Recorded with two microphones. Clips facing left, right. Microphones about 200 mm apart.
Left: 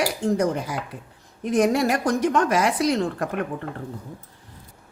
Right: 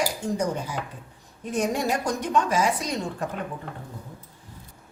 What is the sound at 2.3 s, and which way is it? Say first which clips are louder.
Speech: even; 70° left (ahead or behind).